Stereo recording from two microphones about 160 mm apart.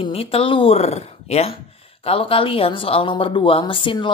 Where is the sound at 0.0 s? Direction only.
35° left (ahead or behind).